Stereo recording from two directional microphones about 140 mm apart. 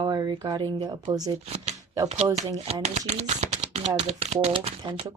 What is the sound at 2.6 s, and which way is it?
Speech, 50° right (ahead or behind).